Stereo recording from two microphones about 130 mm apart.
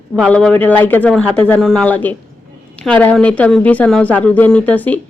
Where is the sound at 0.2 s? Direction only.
5° left (ahead or behind).